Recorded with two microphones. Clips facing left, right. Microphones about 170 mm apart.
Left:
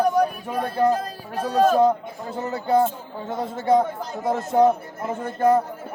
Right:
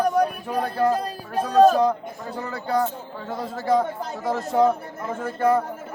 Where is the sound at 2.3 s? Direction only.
20° left (ahead or behind).